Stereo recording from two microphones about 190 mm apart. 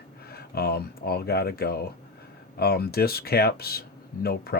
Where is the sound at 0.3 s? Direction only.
55° left (ahead or behind).